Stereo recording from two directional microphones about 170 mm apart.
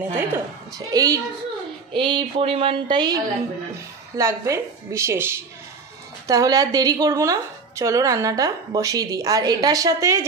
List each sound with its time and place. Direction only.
0.1 s a woman's voice: 15° right (ahead or behind)
4.2 s a woman's voice: 15° right (ahead or behind)